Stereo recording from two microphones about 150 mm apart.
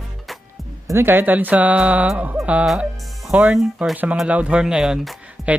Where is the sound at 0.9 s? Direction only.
15° right (ahead or behind).